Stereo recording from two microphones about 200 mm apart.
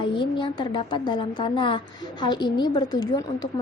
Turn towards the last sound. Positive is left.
turn(degrees=20)  # may be behind; listen again after turning